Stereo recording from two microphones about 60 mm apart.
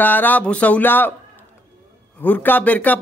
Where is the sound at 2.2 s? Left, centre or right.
Left.